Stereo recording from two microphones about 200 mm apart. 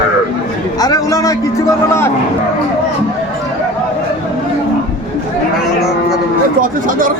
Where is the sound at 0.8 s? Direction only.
20° left (ahead or behind).